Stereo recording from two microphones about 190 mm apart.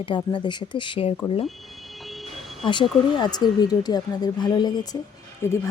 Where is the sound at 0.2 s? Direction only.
25° left (ahead or behind).